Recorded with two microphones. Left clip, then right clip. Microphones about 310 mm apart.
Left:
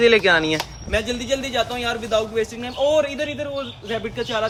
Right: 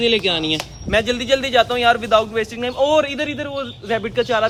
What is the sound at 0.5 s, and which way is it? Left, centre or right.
A man's voice, centre.